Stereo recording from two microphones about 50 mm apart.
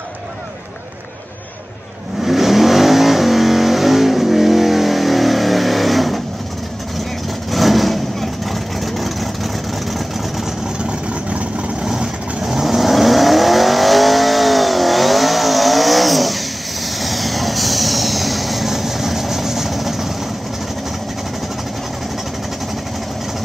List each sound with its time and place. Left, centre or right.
2.2 s vehicle: centre
7.5 s vehicle: centre
10.8 s vehicle: right
11.8 s vehicle: centre